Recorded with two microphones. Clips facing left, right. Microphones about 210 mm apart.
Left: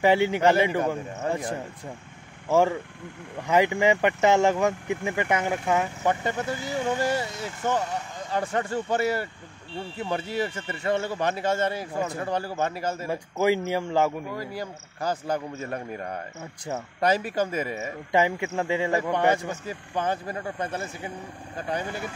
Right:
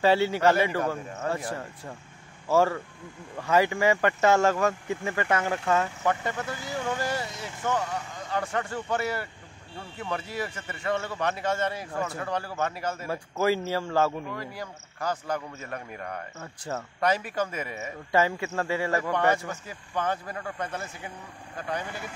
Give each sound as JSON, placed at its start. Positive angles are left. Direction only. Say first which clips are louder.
{"t": 0.0, "sound": "a man's voice", "louder": "left 1 dB", "side_deg": 15}
{"t": 13.1, "sound": "speech", "louder": "left 2 dB", "side_deg": 15}
{"t": 14.3, "sound": "a man's voice", "louder": "left 4 dB", "side_deg": 30}
{"t": 16.3, "sound": "speech", "louder": "left 2 dB", "side_deg": 15}
{"t": 17.0, "sound": "a man's voice", "louder": "left 3 dB", "side_deg": 30}
{"t": 17.7, "sound": "a man's voice", "louder": "even", "side_deg": 15}